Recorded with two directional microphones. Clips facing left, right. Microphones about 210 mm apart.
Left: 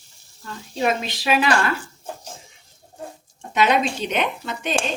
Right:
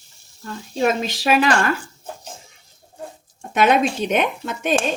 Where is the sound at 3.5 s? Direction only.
50° right (ahead or behind).